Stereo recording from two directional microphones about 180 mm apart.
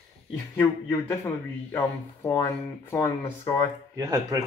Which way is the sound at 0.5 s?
15° left (ahead or behind).